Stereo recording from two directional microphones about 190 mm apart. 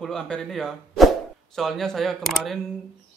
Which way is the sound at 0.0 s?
5° left (ahead or behind).